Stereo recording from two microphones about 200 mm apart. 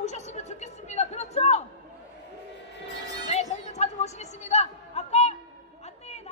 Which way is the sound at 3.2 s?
35° left (ahead or behind).